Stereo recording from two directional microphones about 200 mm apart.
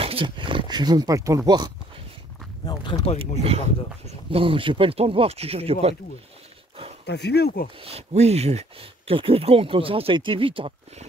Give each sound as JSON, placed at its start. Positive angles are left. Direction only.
{"t": 0.0, "sound": "speech", "side_deg": -25}
{"t": 2.6, "sound": "speech", "side_deg": 20}
{"t": 4.3, "sound": "speech", "side_deg": -25}
{"t": 7.1, "sound": "speech", "side_deg": 55}
{"t": 7.8, "sound": "speech", "side_deg": -30}